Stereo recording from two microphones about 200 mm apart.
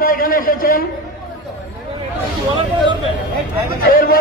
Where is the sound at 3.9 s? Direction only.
45° left (ahead or behind).